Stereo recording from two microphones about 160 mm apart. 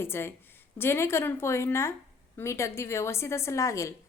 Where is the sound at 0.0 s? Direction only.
15° left (ahead or behind).